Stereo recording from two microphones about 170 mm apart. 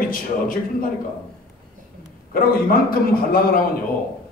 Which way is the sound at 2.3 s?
60° left (ahead or behind).